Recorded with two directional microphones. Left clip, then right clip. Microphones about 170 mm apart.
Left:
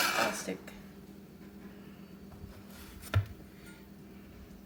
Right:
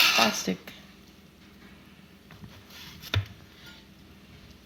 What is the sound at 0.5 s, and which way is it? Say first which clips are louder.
Speech: right 6 dB; 40° right (ahead or behind).